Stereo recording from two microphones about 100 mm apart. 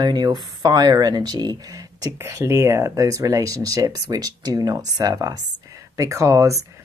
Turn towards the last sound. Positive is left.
turn(degrees=-30)  # may be behind; listen again after turning